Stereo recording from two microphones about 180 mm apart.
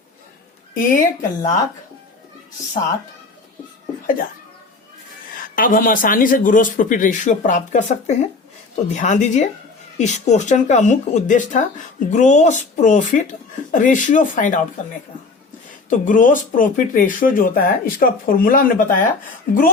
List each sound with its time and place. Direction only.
0.7 s a woman's voice: 50° left (ahead or behind)
5.5 s speech: 50° left (ahead or behind)
15.9 s speech: 45° left (ahead or behind)